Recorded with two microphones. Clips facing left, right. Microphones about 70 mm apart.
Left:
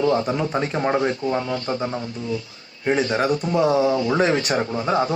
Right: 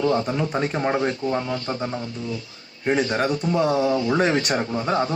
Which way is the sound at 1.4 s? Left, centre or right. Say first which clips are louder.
Left 1 dB; left.